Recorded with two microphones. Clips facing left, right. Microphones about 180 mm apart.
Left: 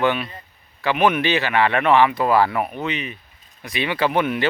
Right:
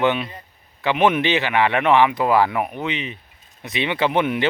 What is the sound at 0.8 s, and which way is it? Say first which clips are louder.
Speech: right 1 dB; 20° right (ahead or behind).